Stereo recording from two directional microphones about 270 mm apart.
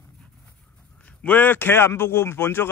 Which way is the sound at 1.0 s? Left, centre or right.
Centre.